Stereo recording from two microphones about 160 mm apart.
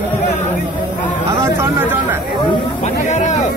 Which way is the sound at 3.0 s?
50° left (ahead or behind).